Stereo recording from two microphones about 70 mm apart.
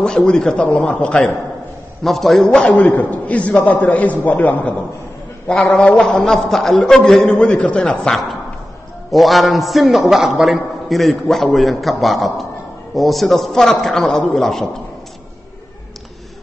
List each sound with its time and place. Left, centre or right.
0.0 s a man's voice: centre
2.0 s a man's voice: centre; by 4.7 s left
5.5 s a man's voice: centre
7.3 s a man's voice: centre